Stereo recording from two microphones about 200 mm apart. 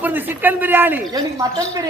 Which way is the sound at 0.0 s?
10° right (ahead or behind).